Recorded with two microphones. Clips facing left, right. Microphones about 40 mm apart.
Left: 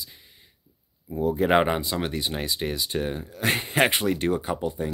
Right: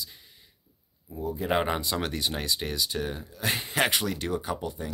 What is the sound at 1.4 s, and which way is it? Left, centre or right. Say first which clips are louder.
Speech: left 6 dB; left.